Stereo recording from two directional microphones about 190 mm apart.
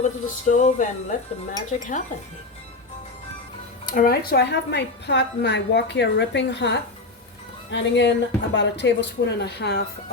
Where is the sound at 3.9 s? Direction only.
50° left (ahead or behind).